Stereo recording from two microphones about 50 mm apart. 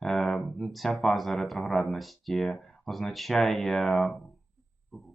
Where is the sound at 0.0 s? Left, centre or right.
Centre.